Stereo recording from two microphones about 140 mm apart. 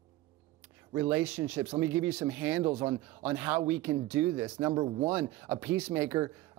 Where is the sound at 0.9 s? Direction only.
15° right (ahead or behind).